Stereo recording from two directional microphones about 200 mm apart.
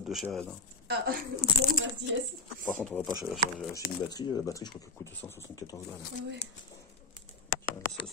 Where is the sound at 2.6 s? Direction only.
5° left (ahead or behind).